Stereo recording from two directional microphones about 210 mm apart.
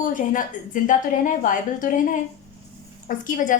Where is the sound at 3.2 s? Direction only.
40° left (ahead or behind).